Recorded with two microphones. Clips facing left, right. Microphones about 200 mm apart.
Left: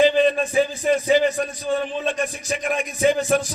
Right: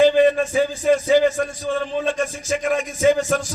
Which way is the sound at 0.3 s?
15° left (ahead or behind).